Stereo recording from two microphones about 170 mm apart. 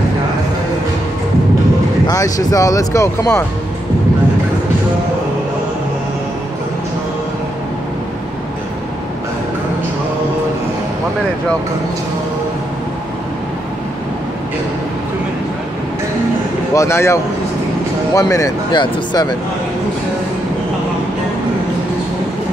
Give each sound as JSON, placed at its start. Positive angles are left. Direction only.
{"t": 2.0, "sound": "speech", "side_deg": 20}
{"t": 16.7, "sound": "speech", "side_deg": 15}